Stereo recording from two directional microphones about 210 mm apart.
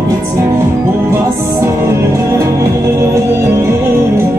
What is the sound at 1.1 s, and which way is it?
Music, 10° right (ahead or behind).